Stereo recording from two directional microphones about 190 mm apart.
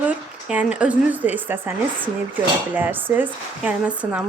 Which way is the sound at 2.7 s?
10° right (ahead or behind).